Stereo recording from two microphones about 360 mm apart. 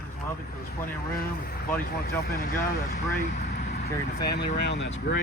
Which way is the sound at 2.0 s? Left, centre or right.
Left.